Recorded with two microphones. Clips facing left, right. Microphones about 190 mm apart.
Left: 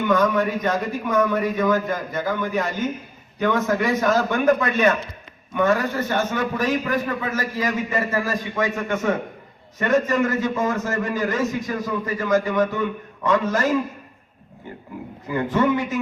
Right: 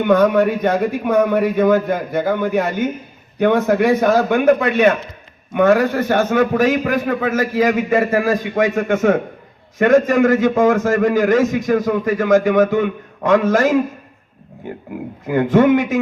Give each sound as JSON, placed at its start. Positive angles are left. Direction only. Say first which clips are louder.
{"t": 0.0, "sound": "a man's voice", "louder": "right 6 dB", "side_deg": -60}
{"t": 9.7, "sound": "a man's voice", "louder": "right 7 dB", "side_deg": -90}
{"t": 15.3, "sound": "a man's voice", "louder": "right 8 dB", "side_deg": -80}